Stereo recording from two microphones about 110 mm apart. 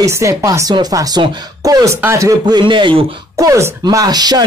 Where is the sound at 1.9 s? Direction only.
25° right (ahead or behind).